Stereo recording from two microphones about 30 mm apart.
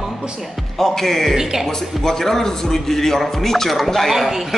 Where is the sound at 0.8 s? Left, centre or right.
Centre.